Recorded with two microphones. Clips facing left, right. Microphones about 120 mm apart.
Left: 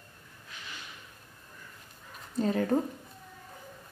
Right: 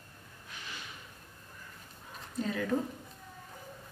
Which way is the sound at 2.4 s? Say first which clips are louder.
Left 5 dB; 40° left (ahead or behind).